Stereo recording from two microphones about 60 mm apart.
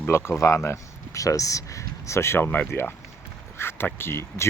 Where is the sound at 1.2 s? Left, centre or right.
Left.